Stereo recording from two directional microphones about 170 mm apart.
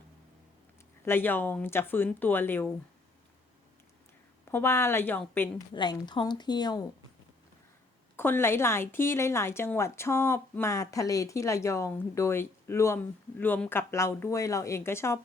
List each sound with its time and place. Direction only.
1.0 s speech: 10° left (ahead or behind)
4.5 s speech: 15° left (ahead or behind)
5.7 s a woman's voice: 25° left (ahead or behind)
8.1 s speech: 15° left (ahead or behind)